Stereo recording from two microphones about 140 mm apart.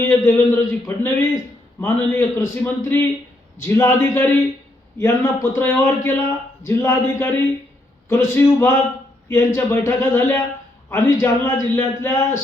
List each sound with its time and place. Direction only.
0.0 s a man's voice: 20° left (ahead or behind)